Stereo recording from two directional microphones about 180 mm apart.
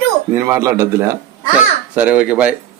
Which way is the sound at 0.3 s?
15° right (ahead or behind).